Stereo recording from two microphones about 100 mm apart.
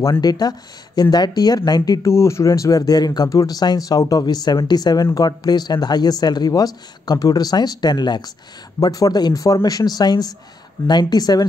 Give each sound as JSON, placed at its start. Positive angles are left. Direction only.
{"t": 0.2, "sound": "speech", "side_deg": 40}
{"t": 2.0, "sound": "speech", "side_deg": 30}